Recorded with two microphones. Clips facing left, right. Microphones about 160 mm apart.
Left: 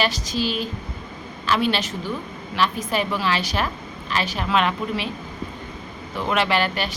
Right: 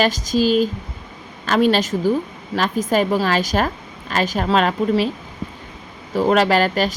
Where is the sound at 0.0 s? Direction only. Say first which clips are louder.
Right 6 dB; 45° right (ahead or behind).